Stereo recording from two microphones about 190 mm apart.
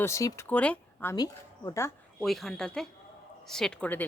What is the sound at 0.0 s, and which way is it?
Speech, 15° left (ahead or behind).